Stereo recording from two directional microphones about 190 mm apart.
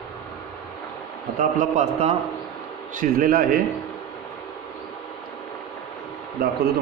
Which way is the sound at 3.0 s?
50° right (ahead or behind).